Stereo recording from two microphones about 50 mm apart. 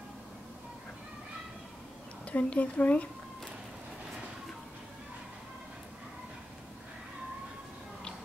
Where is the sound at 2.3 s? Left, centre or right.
Left.